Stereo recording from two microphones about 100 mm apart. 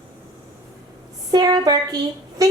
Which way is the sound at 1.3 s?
40° right (ahead or behind).